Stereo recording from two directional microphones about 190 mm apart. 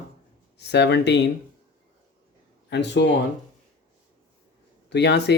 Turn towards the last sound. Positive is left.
turn(degrees=65)  # may be behind; listen again after turning